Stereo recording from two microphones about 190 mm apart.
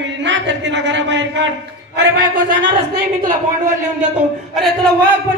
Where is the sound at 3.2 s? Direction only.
45° right (ahead or behind).